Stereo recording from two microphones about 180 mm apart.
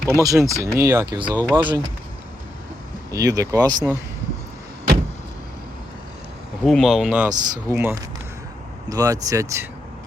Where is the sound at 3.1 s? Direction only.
20° right (ahead or behind).